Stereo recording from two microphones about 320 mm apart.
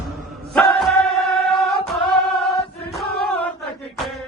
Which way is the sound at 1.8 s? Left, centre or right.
Centre.